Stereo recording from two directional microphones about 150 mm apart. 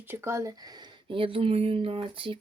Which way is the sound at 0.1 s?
20° right (ahead or behind).